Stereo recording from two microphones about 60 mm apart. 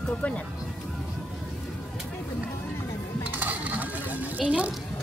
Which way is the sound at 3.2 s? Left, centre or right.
Right.